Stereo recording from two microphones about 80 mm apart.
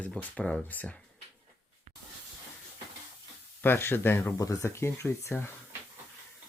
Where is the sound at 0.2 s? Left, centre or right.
Centre.